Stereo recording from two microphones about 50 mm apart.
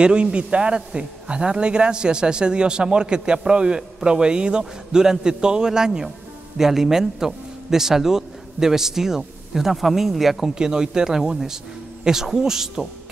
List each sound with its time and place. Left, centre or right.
0.0 s a man's voice: right; by 10.5 s centre
10.5 s a man's voice: centre